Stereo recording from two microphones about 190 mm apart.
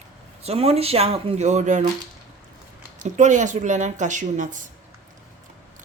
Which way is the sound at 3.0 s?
40° right (ahead or behind).